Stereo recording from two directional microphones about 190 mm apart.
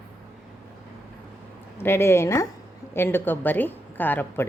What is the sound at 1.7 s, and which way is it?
A woman's voice, 10° left (ahead or behind).